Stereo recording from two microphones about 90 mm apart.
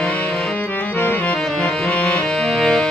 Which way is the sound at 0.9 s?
15° left (ahead or behind).